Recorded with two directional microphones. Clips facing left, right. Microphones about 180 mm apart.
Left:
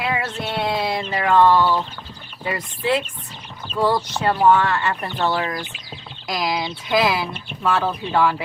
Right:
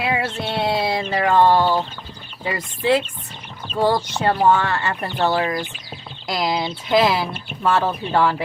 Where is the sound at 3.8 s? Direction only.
30° right (ahead or behind).